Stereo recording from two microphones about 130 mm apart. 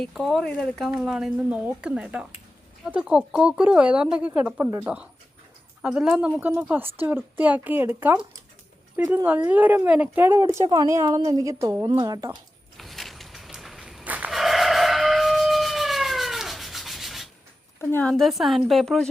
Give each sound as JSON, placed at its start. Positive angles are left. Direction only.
{"t": 0.0, "sound": "a woman's voice", "side_deg": 0}
{"t": 9.2, "sound": "speech", "side_deg": -10}
{"t": 12.3, "sound": "a sound", "side_deg": 0}
{"t": 17.7, "sound": "a woman's voice", "side_deg": 15}
{"t": 18.1, "sound": "a woman's voice", "side_deg": 0}